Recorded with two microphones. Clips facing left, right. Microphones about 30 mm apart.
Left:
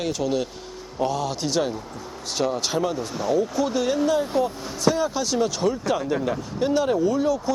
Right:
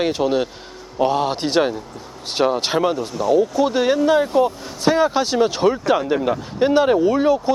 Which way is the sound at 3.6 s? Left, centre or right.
Right.